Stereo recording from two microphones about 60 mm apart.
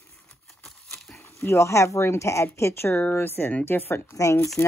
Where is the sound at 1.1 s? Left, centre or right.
Left.